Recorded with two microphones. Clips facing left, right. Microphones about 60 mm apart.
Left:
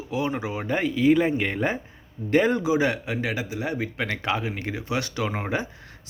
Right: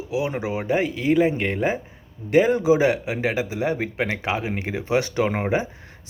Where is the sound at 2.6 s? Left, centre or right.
Right.